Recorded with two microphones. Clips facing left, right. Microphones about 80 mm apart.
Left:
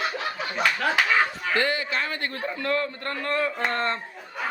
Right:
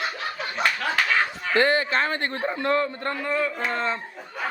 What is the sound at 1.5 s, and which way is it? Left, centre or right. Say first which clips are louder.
A man's voice: right 6 dB; right.